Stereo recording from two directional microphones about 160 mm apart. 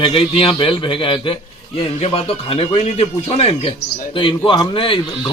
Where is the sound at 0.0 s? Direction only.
35° left (ahead or behind).